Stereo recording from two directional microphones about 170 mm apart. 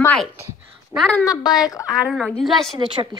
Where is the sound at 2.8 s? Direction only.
30° right (ahead or behind).